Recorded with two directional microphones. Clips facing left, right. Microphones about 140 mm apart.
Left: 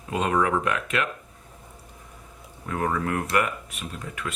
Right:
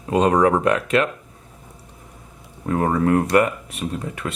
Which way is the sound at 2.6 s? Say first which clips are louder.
Right 8 dB; 35° right (ahead or behind).